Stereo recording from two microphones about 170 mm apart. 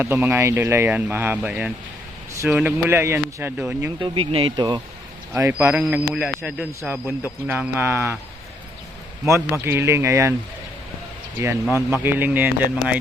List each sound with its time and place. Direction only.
0.0 s a man's voice: 15° right (ahead or behind)
4.0 s speech: 30° right (ahead or behind)
5.3 s a man's voice: 10° right (ahead or behind)
9.2 s a man's voice: 15° right (ahead or behind)
12.0 s a man's voice: 10° right (ahead or behind)